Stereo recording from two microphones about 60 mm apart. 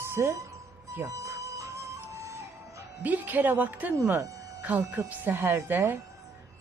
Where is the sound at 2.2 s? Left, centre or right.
Right.